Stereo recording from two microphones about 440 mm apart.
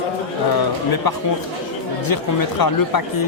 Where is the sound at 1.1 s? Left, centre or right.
Left.